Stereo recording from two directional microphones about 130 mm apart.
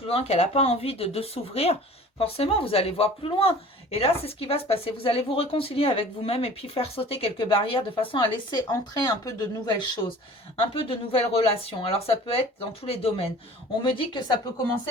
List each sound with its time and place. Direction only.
0.1 s speech: 55° left (ahead or behind); by 10.0 s 30° left (ahead or behind)
10.6 s speech: 45° left (ahead or behind)